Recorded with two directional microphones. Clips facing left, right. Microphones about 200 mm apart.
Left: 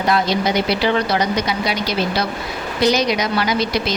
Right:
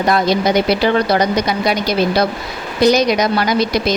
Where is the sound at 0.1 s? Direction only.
45° right (ahead or behind).